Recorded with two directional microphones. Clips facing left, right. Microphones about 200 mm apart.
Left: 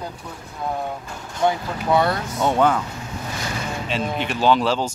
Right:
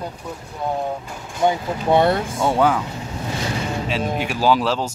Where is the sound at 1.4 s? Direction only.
20° right (ahead or behind).